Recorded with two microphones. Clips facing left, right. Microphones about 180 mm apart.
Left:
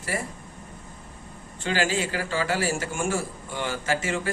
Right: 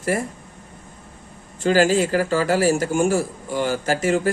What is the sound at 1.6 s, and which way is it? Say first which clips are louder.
A man's voice: right 9 dB; 40° right (ahead or behind).